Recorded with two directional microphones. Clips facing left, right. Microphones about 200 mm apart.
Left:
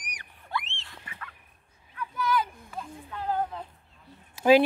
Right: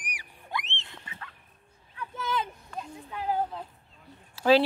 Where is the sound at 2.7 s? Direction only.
15° right (ahead or behind).